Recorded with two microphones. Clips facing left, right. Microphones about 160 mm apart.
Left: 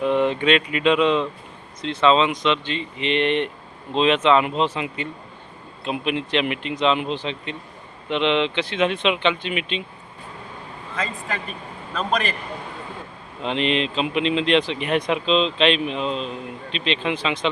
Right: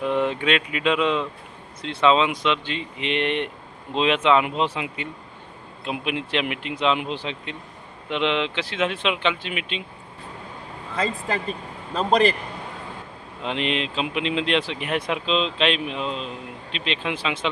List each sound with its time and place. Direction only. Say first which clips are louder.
0.0 s speech: left 3 dB; 5° right (ahead or behind)
10.9 s speech: right 3 dB; 35° right (ahead or behind)
13.4 s speech: left 3 dB; 5° right (ahead or behind)